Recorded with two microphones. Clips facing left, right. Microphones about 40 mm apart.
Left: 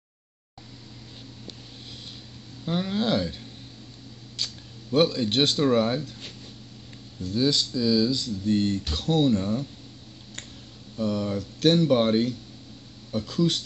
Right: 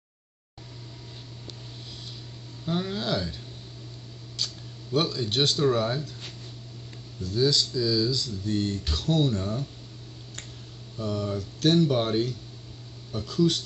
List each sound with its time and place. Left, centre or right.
2.6 s speech: centre
3.0 s speech: left
4.4 s a sound: left
4.9 s a man's voice: left
7.3 s speech: left
11.0 s a man's voice: left